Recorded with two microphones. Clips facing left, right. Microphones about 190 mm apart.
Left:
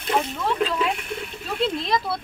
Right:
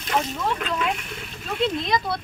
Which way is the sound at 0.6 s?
30° left (ahead or behind).